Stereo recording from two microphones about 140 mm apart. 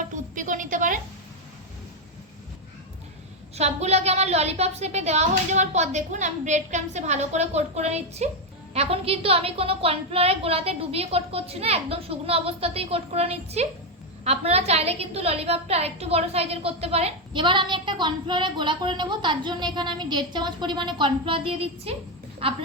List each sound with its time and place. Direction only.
0.3 s a sound: 65° right (ahead or behind)
3.5 s a woman's voice: 50° right (ahead or behind)
17.4 s a woman's voice: 35° right (ahead or behind)